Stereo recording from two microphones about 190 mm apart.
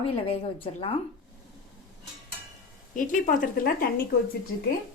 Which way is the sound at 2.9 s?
45° left (ahead or behind).